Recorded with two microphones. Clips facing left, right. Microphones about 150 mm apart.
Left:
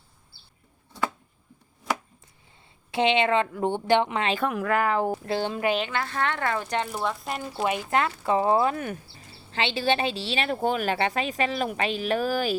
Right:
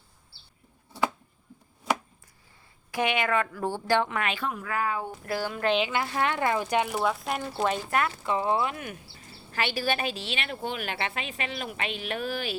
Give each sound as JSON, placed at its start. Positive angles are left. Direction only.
{"t": 2.9, "sound": "a woman's voice", "side_deg": 25}
{"t": 4.4, "sound": "speech", "side_deg": 80}
{"t": 5.2, "sound": "a woman's voice", "side_deg": 25}
{"t": 5.6, "sound": "speech", "side_deg": 0}
{"t": 5.9, "sound": "speech", "side_deg": -15}
{"t": 7.5, "sound": "speech", "side_deg": 10}
{"t": 7.9, "sound": "a woman's voice", "side_deg": 25}
{"t": 9.5, "sound": "speech", "side_deg": 25}